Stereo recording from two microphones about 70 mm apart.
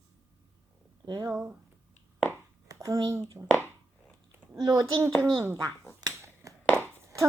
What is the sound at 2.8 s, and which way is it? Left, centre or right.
Speech, right.